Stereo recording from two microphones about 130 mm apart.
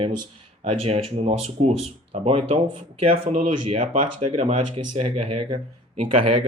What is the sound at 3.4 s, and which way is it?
Speech, 75° right (ahead or behind).